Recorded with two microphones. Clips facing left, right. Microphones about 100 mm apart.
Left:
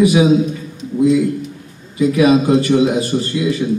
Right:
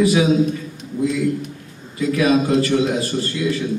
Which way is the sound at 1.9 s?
20° left (ahead or behind).